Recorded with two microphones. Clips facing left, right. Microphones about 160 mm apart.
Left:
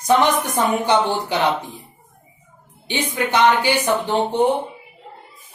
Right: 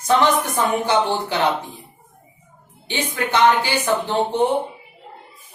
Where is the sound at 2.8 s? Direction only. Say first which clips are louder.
Left 2 dB; 15° left (ahead or behind).